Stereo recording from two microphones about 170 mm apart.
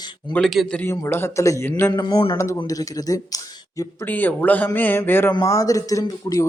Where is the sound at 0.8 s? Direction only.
15° left (ahead or behind).